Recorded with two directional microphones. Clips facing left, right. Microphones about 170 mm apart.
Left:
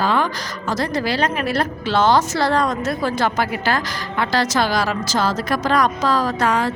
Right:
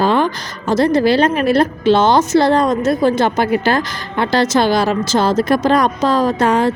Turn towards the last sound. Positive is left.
turn(degrees=-25)  # may be behind; listen again after turning